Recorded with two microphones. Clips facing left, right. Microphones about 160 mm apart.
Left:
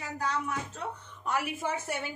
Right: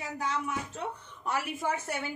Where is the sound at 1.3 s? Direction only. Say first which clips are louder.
Even; centre (ahead or behind).